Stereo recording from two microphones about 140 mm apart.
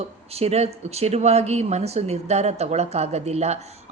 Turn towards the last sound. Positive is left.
turn(degrees=-50)  # may be behind; listen again after turning